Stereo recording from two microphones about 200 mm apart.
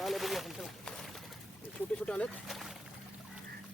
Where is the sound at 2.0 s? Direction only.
5° left (ahead or behind).